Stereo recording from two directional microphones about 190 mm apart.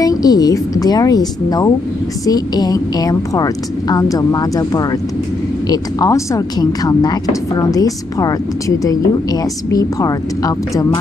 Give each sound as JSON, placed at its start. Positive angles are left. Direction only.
{"t": 0.0, "sound": "speech", "side_deg": 20}